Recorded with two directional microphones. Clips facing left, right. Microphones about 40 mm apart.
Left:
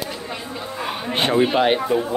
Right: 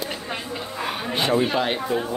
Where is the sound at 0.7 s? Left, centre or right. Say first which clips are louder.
Left 1 dB; centre.